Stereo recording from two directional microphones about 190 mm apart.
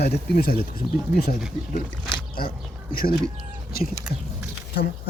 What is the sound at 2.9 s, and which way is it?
Speech, 50° left (ahead or behind).